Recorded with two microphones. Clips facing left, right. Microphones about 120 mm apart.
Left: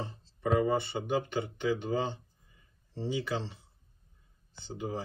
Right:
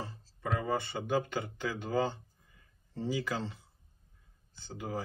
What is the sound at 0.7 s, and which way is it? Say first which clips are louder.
Speech: left 3 dB; 20° left (ahead or behind).